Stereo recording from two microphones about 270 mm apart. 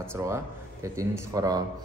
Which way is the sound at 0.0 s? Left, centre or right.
Centre.